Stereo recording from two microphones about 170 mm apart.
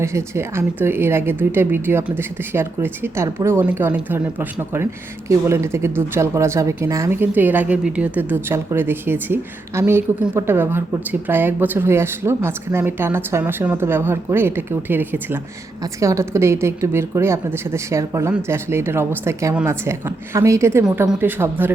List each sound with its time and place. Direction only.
0.0 s speech: 15° right (ahead or behind)